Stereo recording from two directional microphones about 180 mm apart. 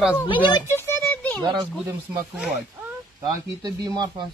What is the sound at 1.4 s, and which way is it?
Speech, 25° right (ahead or behind).